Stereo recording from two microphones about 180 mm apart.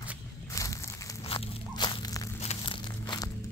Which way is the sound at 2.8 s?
25° left (ahead or behind).